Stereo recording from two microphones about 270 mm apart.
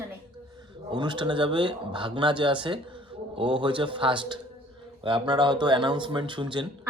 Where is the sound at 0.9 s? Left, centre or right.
Centre.